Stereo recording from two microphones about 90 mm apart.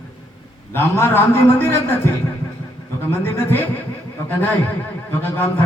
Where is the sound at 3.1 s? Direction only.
25° left (ahead or behind).